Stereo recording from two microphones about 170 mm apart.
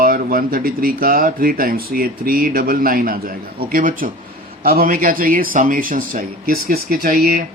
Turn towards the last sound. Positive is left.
turn(degrees=-60)  # may be behind; listen again after turning